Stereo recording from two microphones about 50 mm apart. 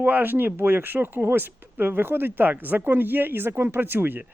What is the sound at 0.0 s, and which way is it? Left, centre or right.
Speech, right.